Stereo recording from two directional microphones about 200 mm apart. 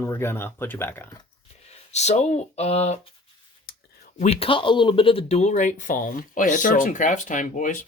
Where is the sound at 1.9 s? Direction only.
35° left (ahead or behind).